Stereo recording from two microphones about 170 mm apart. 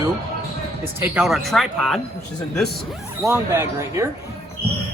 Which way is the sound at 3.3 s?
15° right (ahead or behind).